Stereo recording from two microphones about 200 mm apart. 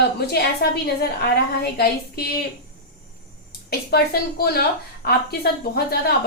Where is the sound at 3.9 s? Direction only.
50° left (ahead or behind).